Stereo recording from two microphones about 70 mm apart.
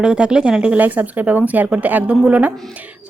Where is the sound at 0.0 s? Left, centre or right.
Centre.